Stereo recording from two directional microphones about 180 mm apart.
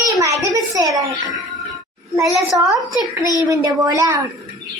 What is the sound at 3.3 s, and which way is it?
Speech, 20° right (ahead or behind).